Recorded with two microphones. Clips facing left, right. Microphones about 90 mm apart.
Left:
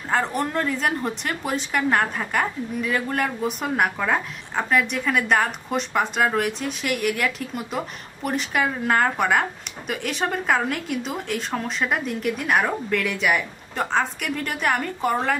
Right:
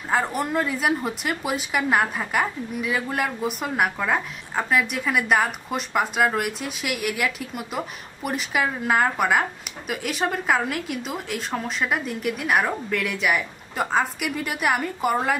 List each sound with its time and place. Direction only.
0.1 s speech: 5° right (ahead or behind)